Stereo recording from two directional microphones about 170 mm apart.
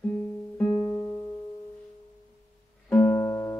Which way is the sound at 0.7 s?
30° left (ahead or behind).